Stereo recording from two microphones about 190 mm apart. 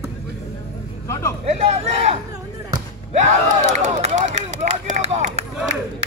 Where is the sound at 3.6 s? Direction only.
40° right (ahead or behind).